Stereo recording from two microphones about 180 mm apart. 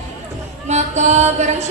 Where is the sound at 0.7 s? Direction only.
40° right (ahead or behind).